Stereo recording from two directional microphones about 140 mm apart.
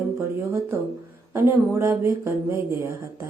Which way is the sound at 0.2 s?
20° right (ahead or behind).